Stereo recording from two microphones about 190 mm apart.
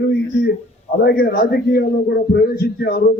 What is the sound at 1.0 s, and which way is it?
A man's voice, 55° left (ahead or behind).